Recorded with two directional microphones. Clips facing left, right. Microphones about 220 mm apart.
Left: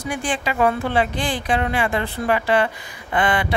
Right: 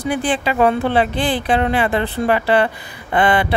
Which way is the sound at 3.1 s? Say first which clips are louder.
Right 5 dB; 35° right (ahead or behind).